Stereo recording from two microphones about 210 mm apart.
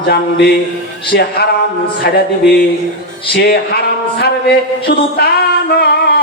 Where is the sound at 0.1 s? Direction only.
50° left (ahead or behind).